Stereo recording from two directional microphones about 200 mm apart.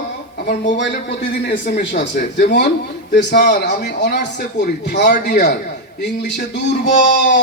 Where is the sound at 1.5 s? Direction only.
40° left (ahead or behind).